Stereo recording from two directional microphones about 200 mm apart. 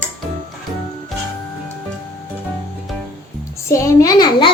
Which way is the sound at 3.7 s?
15° left (ahead or behind).